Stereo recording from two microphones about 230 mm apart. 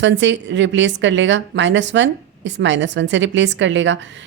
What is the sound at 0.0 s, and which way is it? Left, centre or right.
Speech, right.